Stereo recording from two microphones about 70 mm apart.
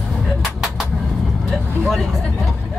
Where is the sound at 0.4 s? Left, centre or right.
Centre.